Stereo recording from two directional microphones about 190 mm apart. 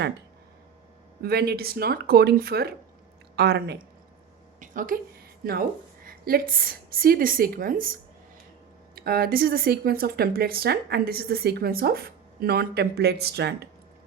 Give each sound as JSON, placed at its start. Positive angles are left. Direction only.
{"t": 1.2, "sound": "speech", "side_deg": -55}
{"t": 4.6, "sound": "a woman's voice", "side_deg": -45}
{"t": 6.1, "sound": "speech", "side_deg": -50}
{"t": 9.0, "sound": "speech", "side_deg": -50}